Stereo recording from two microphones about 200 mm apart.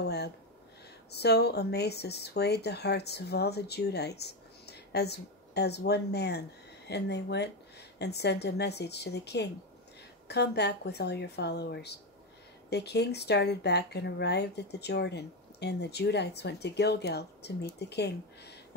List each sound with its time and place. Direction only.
0.0 s speech: 55° left (ahead or behind)